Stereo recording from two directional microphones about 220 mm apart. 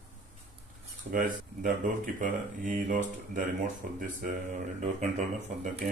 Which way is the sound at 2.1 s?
35° right (ahead or behind).